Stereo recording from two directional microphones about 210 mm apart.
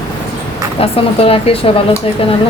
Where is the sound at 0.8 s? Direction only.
25° left (ahead or behind).